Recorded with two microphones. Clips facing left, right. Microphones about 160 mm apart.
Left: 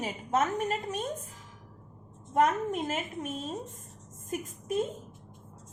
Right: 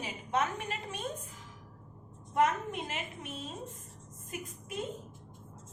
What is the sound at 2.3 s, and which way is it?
A woman's voice, 45° left (ahead or behind).